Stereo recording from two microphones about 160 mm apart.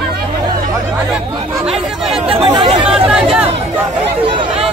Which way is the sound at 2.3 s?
30° right (ahead or behind).